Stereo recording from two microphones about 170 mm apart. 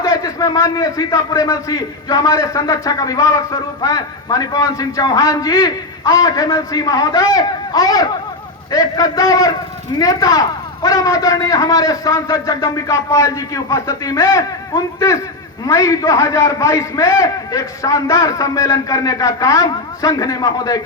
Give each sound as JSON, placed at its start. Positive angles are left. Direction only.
{"t": 0.0, "sound": "a man's voice", "side_deg": 20}